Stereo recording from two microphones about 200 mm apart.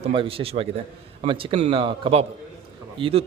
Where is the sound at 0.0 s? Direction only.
25° right (ahead or behind).